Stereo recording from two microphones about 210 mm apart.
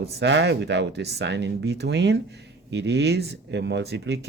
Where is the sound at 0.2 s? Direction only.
55° right (ahead or behind).